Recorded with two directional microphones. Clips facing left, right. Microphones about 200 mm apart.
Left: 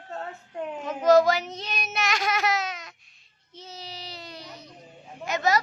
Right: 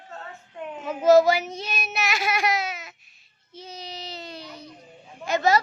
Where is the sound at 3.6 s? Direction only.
15° right (ahead or behind).